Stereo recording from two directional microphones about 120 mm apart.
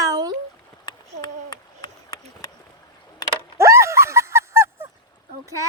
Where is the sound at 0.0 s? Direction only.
30° right (ahead or behind).